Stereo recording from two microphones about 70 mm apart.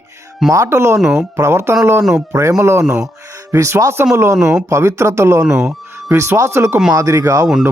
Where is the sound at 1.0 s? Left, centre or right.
Centre.